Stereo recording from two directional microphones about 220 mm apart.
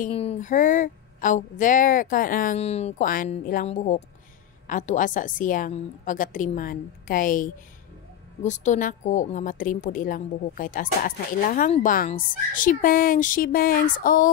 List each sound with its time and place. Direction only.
0.0 s a woman's voice: 25° left (ahead or behind)